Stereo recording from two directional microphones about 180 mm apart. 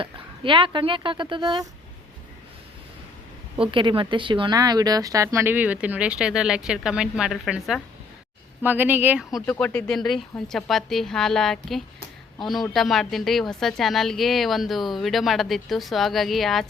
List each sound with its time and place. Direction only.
0.0 s speech: 30° right (ahead or behind)
3.6 s speech: 30° right (ahead or behind); by 9.4 s 5° right (ahead or behind)
9.5 s speech: 5° left (ahead or behind)